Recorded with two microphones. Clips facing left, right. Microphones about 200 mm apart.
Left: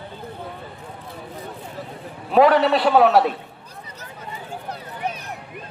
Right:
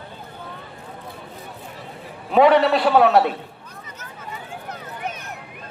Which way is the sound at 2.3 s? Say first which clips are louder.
Even; centre (ahead or behind).